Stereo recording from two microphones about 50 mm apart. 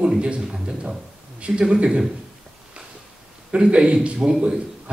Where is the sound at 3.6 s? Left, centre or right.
Right.